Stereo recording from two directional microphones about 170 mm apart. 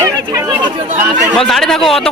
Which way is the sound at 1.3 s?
Centre (ahead or behind).